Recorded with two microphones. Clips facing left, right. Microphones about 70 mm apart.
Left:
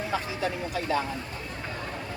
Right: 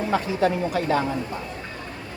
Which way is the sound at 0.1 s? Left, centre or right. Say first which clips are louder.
Right 10 dB; right.